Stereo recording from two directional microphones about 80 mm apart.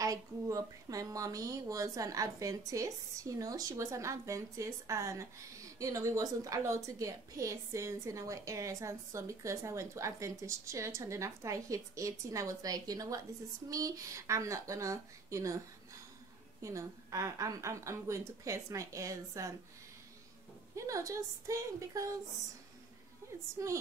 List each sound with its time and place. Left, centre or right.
0.0 s speech: right
16.6 s speech: right
20.7 s speech: right
23.6 s a woman's voice: right